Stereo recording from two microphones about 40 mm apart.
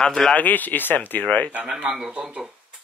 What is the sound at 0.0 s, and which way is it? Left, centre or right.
Speech, centre.